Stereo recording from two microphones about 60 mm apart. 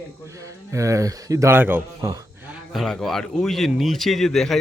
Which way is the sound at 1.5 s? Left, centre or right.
Right.